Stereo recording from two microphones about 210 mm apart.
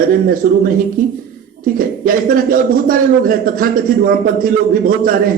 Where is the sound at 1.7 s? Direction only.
40° right (ahead or behind).